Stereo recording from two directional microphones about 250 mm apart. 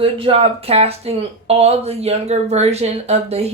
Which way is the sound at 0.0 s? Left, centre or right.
Right.